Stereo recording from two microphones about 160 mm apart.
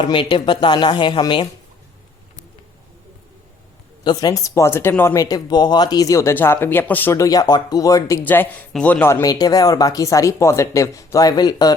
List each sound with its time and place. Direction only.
0.0 s speech: 30° left (ahead or behind)
4.0 s speech: 25° left (ahead or behind)
9.2 s speech: 25° left (ahead or behind)